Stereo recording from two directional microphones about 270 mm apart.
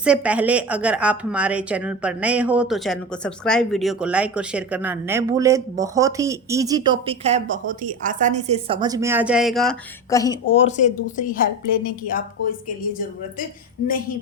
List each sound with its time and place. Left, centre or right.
0.0 s a woman's voice: centre
10.1 s a woman's voice: centre; by 12.2 s left